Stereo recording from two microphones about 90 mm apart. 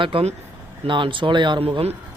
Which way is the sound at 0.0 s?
80° right.